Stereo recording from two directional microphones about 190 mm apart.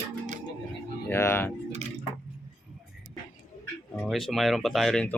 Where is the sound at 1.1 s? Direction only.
10° left (ahead or behind).